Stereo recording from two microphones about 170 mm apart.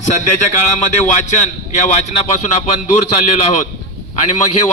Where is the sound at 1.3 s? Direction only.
45° left (ahead or behind).